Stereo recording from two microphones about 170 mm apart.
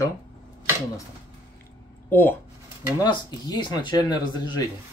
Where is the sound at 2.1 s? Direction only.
10° left (ahead or behind).